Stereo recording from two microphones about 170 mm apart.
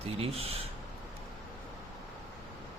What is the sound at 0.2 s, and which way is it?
Speech, 35° right (ahead or behind).